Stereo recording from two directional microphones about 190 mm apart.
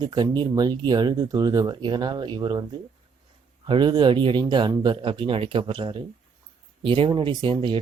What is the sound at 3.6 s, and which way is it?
Speech, 25° right (ahead or behind).